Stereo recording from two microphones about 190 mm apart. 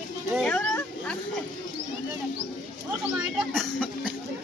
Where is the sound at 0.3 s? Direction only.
5° left (ahead or behind).